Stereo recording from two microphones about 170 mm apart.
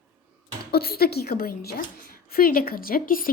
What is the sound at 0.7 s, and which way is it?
A woman's voice, 65° left (ahead or behind).